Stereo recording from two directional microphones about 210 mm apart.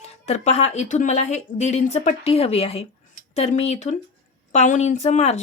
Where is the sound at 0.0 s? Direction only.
30° left (ahead or behind).